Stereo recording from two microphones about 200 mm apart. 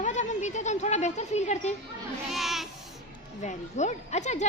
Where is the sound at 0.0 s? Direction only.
35° left (ahead or behind).